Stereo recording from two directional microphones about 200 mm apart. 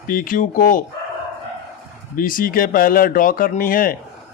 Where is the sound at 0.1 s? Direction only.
45° left (ahead or behind).